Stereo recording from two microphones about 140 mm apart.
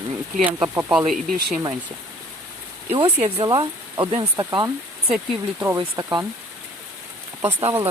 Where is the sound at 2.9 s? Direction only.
45° right (ahead or behind).